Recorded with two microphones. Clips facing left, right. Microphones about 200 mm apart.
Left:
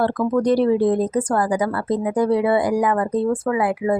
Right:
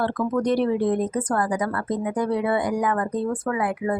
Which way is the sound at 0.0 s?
35° left (ahead or behind).